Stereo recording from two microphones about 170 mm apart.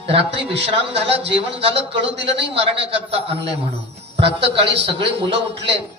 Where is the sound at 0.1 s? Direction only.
35° right (ahead or behind).